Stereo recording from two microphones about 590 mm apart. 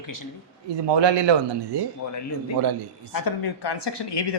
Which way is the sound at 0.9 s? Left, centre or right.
Right.